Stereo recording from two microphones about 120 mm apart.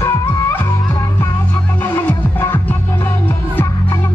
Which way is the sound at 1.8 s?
20° left (ahead or behind).